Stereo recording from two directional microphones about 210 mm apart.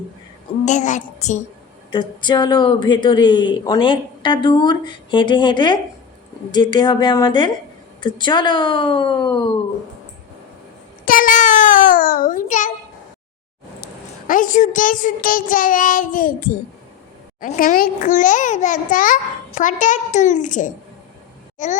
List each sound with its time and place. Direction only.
0.6 s child singing: 35° left (ahead or behind)
1.9 s speech: 20° left (ahead or behind)
11.0 s a sound: 40° left (ahead or behind)
13.8 s a child's voice: 40° left (ahead or behind)